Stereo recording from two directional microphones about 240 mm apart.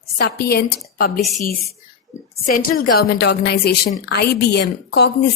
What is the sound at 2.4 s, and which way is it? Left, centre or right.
A woman's voice, left.